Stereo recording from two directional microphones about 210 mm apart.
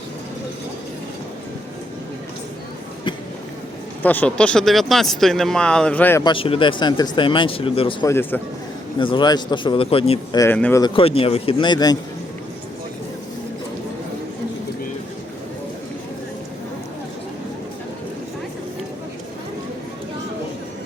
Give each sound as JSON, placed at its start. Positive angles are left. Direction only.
{"t": 4.0, "sound": "speech", "side_deg": 10}
{"t": 6.2, "sound": "speech", "side_deg": 25}
{"t": 8.1, "sound": "a man's voice", "side_deg": 10}
{"t": 9.0, "sound": "speech", "side_deg": 25}
{"t": 10.4, "sound": "speech", "side_deg": 10}